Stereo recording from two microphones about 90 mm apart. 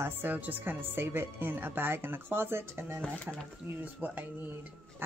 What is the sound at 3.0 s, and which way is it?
Speech, 15° left (ahead or behind).